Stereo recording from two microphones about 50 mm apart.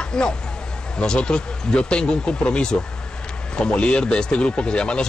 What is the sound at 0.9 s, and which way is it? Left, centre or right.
Speech, centre.